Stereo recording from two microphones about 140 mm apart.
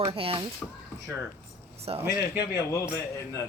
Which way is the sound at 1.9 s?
40° right (ahead or behind).